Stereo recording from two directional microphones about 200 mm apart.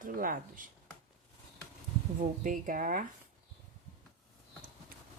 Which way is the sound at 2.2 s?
40° right (ahead or behind).